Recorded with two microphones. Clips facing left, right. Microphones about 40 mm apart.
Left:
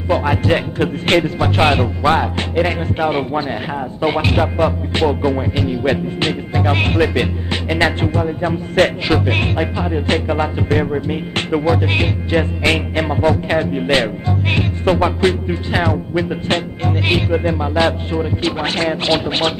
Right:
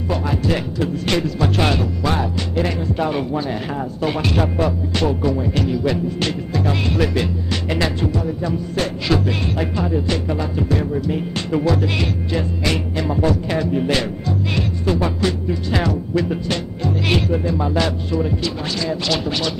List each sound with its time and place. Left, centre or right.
0.1 s music: left
5.8 s music: left
7.0 s music: left
7.8 s music: left
9.0 s music: left
9.3 s music: left
9.6 s music: left
17.6 s music: left
19.0 s music: left